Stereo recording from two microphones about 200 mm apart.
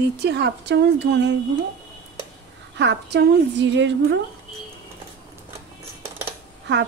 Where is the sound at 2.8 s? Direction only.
60° right (ahead or behind).